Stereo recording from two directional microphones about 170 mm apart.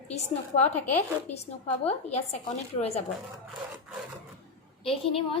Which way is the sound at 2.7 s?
40° left (ahead or behind).